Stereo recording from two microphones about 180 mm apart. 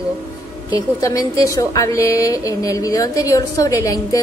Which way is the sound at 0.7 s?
20° left (ahead or behind).